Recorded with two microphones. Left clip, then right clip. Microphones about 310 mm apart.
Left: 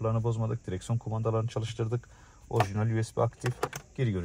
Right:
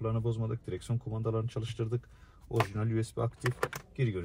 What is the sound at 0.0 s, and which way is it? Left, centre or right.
Speech, left.